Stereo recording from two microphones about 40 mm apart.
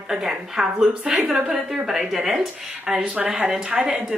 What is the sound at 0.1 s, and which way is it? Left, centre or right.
A woman's voice, centre.